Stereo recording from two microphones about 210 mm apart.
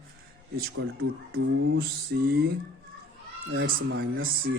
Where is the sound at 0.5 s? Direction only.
45° right (ahead or behind).